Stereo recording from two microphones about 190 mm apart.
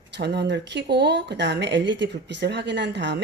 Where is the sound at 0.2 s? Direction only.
60° right (ahead or behind).